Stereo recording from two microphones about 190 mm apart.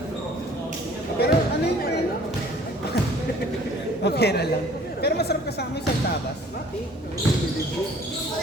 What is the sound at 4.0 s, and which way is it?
Speech, 60° left (ahead or behind).